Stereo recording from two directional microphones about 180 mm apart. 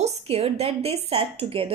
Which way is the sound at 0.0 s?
35° right (ahead or behind).